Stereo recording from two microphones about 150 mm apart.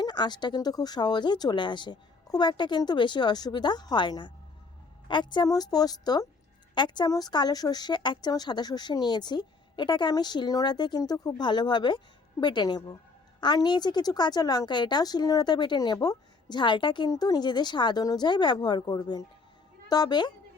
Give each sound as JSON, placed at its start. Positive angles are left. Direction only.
{"t": 0.0, "sound": "a woman's voice", "side_deg": 30}